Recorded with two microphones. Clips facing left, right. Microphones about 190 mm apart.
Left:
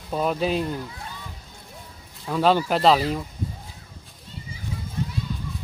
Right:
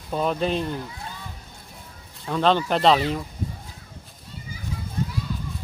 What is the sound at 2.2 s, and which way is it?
Speech, 5° left (ahead or behind).